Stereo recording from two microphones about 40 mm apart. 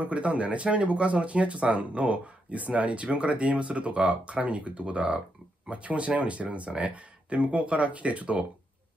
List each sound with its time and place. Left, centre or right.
0.0 s speech: right